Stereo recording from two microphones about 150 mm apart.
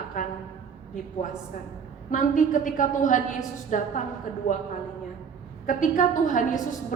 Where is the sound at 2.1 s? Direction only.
60° left (ahead or behind).